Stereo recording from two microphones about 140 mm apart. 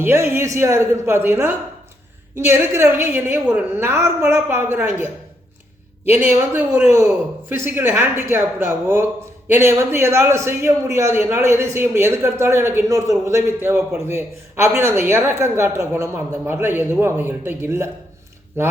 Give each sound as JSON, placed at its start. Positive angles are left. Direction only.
{"t": 0.0, "sound": "a man's voice", "side_deg": -15}